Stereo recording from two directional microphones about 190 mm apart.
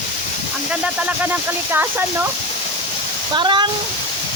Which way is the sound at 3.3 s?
25° right (ahead or behind).